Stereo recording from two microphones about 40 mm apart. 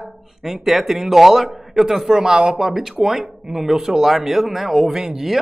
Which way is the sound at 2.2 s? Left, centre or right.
Centre.